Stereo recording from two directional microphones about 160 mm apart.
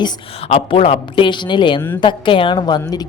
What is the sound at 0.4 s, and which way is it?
A woman's voice, 35° left (ahead or behind).